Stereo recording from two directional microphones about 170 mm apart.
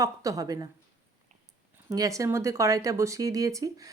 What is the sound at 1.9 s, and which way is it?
Speech, 20° right (ahead or behind).